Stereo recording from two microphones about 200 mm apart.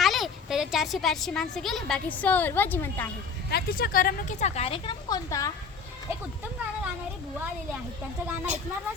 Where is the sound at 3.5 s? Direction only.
45° left (ahead or behind); by 5.5 s 15° left (ahead or behind).